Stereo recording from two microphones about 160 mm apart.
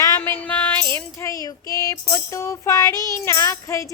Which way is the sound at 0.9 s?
20° left (ahead or behind).